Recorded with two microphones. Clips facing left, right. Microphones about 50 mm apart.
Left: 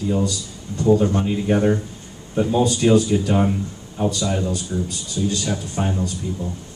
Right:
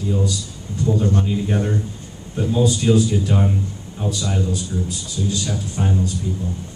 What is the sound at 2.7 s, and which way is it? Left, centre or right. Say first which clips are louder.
Speech: left 2 dB; left.